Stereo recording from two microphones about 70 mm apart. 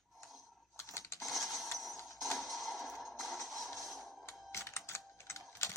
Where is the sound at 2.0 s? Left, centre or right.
Centre.